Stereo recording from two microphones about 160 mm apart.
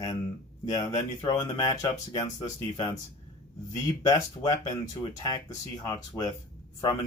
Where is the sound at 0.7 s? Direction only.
25° left (ahead or behind).